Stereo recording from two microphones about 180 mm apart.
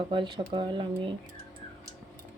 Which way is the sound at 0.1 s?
25° right (ahead or behind).